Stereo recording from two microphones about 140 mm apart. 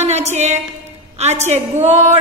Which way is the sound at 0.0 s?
50° right (ahead or behind).